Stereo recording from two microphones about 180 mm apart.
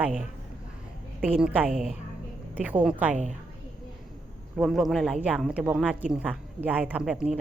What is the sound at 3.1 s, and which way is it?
Speech, 40° right (ahead or behind).